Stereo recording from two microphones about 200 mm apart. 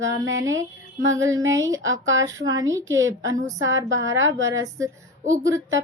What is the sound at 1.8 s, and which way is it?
Speech, 75° right (ahead or behind).